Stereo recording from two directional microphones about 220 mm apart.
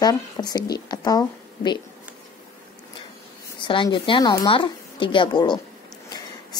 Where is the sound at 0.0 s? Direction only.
15° left (ahead or behind).